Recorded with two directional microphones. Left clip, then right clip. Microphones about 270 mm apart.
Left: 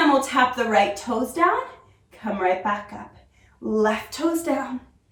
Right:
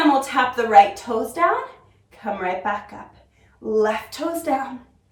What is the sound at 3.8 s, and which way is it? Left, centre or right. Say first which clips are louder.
Speech: right 2 dB; centre.